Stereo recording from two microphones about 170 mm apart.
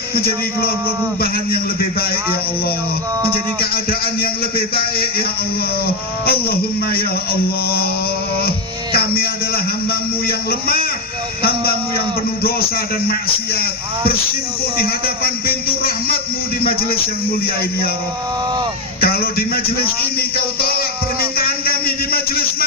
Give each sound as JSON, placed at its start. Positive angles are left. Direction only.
{"t": 0.2, "sound": "a man's voice", "side_deg": 65}
{"t": 3.6, "sound": "a man's voice", "side_deg": 60}
{"t": 6.2, "sound": "a man's voice", "side_deg": 65}
{"t": 8.4, "sound": "music", "side_deg": 65}
{"t": 9.9, "sound": "a man's voice", "side_deg": 65}
{"t": 18.9, "sound": "a man's voice", "side_deg": 60}